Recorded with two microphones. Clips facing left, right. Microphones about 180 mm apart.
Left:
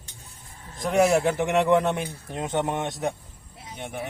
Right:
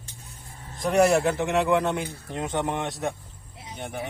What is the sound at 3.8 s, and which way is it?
Speech, centre (ahead or behind).